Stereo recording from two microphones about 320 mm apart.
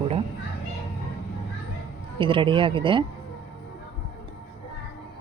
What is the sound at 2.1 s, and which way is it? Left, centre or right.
Speech, centre.